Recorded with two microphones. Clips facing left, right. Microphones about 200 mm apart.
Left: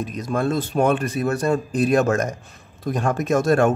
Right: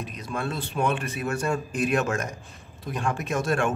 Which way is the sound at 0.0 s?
45° left (ahead or behind).